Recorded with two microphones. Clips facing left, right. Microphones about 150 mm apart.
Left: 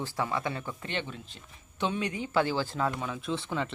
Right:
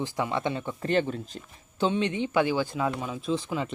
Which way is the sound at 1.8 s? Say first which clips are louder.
Right 5 dB; 25° right (ahead or behind).